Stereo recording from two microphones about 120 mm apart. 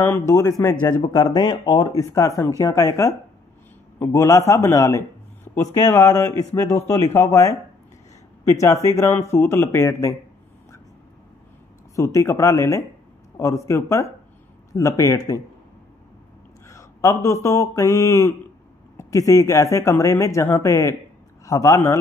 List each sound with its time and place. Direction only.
0.0 s speech: 20° left (ahead or behind)
11.9 s speech: 25° left (ahead or behind)
16.6 s speech: 25° left (ahead or behind)